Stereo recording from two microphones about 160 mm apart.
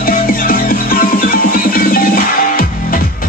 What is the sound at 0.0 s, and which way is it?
Music, 65° left (ahead or behind).